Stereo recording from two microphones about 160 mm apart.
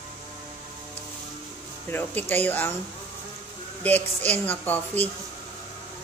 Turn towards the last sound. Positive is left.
turn(degrees=10)  # may be behind; listen again after turning